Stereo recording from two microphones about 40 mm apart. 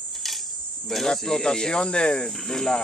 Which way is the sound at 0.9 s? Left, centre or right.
Centre.